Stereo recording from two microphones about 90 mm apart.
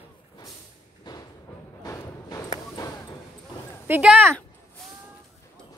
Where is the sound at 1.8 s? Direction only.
35° left (ahead or behind).